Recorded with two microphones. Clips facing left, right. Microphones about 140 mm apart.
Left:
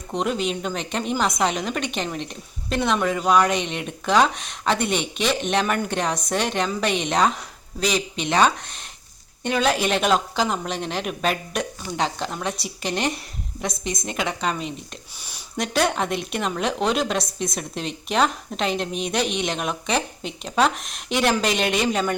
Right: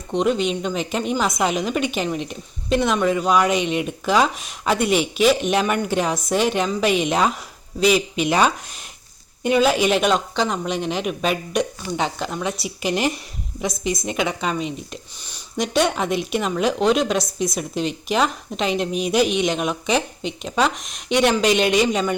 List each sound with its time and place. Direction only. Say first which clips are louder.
0.1 s speech: right 4 dB; centre (ahead or behind)
15.2 s speech: right 3 dB; 10° left (ahead or behind)